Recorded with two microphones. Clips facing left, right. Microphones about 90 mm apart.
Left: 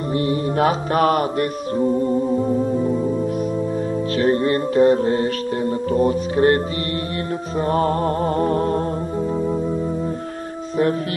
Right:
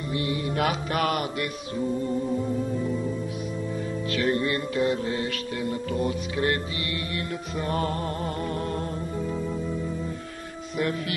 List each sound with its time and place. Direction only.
0.1 s mantra: 40° left (ahead or behind)
4.2 s mantra: 35° left (ahead or behind)
7.6 s music: 35° left (ahead or behind)